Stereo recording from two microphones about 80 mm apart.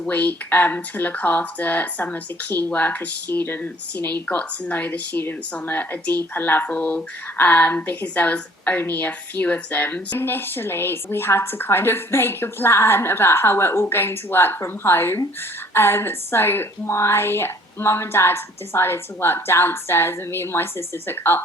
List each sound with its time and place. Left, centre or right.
0.0 s a woman's voice: left